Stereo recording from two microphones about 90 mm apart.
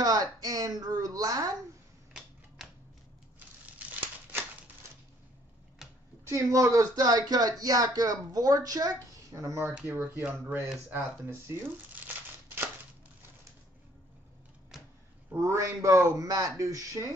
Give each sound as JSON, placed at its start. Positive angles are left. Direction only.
{"t": 0.0, "sound": "speech", "side_deg": -45}
{"t": 3.3, "sound": "crumpling", "side_deg": -20}
{"t": 6.2, "sound": "speech", "side_deg": -35}
{"t": 9.3, "sound": "a man's voice", "side_deg": -35}
{"t": 14.7, "sound": "a sound", "side_deg": -5}
{"t": 15.3, "sound": "a man's voice", "side_deg": -35}